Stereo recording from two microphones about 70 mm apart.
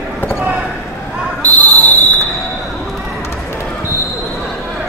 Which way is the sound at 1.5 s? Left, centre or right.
Left.